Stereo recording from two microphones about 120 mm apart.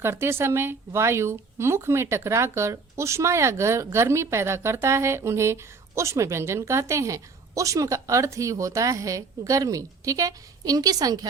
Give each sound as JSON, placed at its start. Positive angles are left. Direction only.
{"t": 0.0, "sound": "a woman's voice", "side_deg": -20}